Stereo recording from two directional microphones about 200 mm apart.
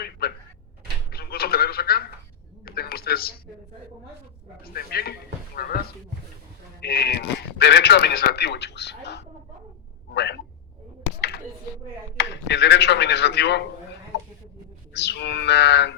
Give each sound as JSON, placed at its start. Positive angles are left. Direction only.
{"t": 0.0, "sound": "a man's voice", "side_deg": 50}
{"t": 1.1, "sound": "telephone", "side_deg": 50}
{"t": 2.6, "sound": "a sound", "side_deg": 50}
{"t": 4.6, "sound": "a man's voice", "side_deg": 50}
{"t": 6.8, "sound": "a man's voice", "side_deg": 50}
{"t": 10.1, "sound": "a sound", "side_deg": 55}
{"t": 12.1, "sound": "a man's voice", "side_deg": 60}
{"t": 14.9, "sound": "a man's voice", "side_deg": 55}